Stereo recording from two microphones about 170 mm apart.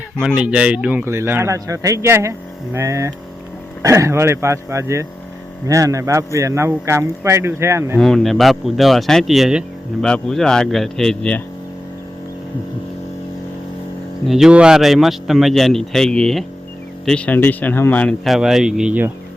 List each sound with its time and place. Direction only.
0.3 s a man's voice: 5° right (ahead or behind)
7.9 s speech: centre (ahead or behind)
14.3 s a man's voice: 5° right (ahead or behind)
18.3 s speech: 5° right (ahead or behind)